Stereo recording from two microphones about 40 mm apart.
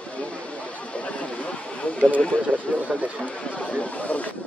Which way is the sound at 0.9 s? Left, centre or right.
Left.